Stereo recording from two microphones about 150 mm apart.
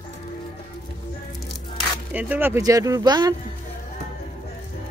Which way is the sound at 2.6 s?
25° right (ahead or behind).